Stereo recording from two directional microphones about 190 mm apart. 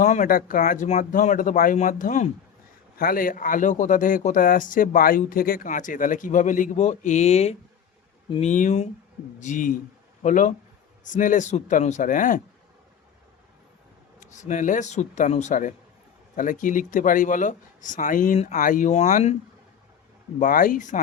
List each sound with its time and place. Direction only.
0.0 s speech: 40° left (ahead or behind)
14.2 s speech: 40° left (ahead or behind)
20.4 s speech: 45° left (ahead or behind)